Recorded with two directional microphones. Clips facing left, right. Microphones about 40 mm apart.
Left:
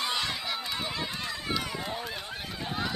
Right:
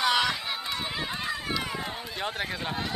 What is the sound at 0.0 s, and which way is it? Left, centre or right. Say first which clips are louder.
Run: right 7 dB; right.